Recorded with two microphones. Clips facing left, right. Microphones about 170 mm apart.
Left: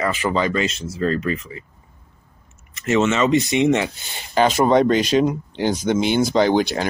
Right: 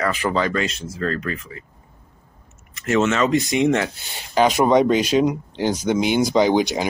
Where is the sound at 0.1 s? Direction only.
Centre (ahead or behind).